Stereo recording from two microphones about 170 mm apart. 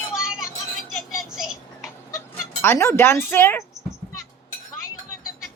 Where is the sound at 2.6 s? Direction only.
15° left (ahead or behind).